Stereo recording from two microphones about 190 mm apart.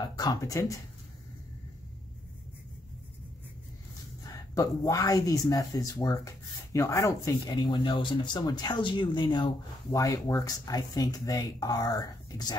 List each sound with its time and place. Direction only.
0.0 s speech: 20° left (ahead or behind)
4.2 s speech: 20° left (ahead or behind)